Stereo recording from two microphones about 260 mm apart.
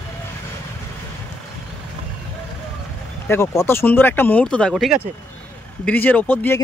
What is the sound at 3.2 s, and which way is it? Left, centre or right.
Speech, centre.